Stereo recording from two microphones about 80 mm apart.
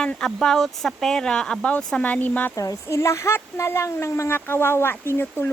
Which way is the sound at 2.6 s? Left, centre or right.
Left.